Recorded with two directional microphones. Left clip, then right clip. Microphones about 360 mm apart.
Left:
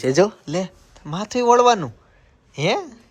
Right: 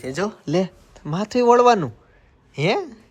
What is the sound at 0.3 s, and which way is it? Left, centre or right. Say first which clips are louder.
Speech: right 3 dB; centre.